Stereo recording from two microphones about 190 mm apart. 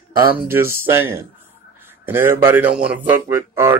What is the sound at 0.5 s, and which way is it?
Speech, 10° right (ahead or behind).